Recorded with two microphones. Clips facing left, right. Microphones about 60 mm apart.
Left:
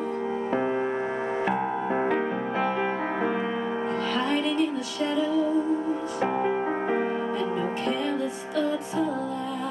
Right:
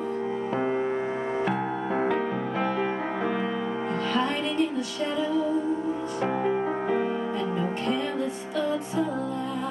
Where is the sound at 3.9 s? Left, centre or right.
Centre.